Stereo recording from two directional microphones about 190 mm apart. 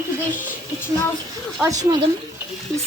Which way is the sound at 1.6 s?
20° right (ahead or behind).